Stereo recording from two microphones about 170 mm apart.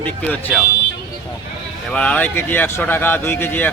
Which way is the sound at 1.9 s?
5° left (ahead or behind).